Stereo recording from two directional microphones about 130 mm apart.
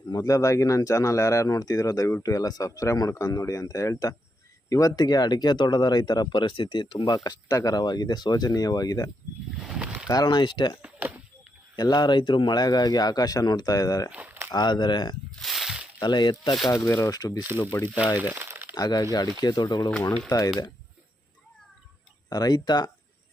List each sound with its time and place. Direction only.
0.1 s speech: 25° left (ahead or behind); by 7.0 s 40° left (ahead or behind)
7.3 s speech: 30° left (ahead or behind)
9.6 s a sound: 5° right (ahead or behind)
10.1 s speech: 30° left (ahead or behind)
10.8 s a sound: 15° right (ahead or behind)
11.8 s speech: 35° left (ahead or behind)
14.1 s walk: 15° right (ahead or behind)
14.5 s speech: 35° left (ahead or behind)
15.4 s a sound: centre (ahead or behind)
16.0 s speech: 35° left (ahead or behind)
16.6 s speech: 20° left (ahead or behind)
18.2 s crumpling: 15° right (ahead or behind)
18.7 s speech: 30° left (ahead or behind)
22.3 s speech: 30° left (ahead or behind)